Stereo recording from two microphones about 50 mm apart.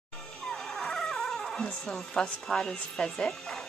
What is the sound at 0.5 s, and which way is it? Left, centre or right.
Music, centre.